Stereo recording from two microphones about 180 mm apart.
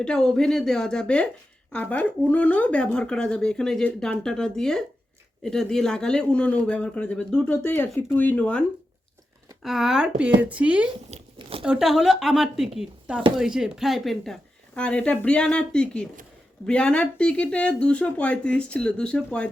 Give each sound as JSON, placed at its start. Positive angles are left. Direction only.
{"t": 0.0, "sound": "a man's voice", "side_deg": 5}
{"t": 9.6, "sound": "a man's voice", "side_deg": 0}
{"t": 11.3, "sound": "a sound", "side_deg": -30}
{"t": 11.6, "sound": "a man's voice", "side_deg": -5}